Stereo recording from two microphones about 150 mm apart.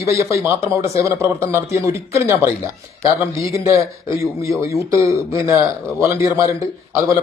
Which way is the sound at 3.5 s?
20° right (ahead or behind).